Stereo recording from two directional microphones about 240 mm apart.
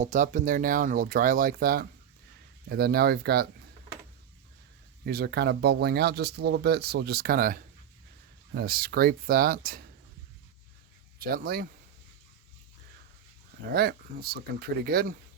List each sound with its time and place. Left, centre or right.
0.0 s speech: right
5.0 s speech: right
11.2 s speech: right
13.7 s speech: right